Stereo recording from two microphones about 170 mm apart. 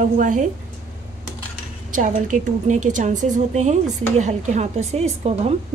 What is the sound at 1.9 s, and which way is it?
A woman's voice, 50° right (ahead or behind).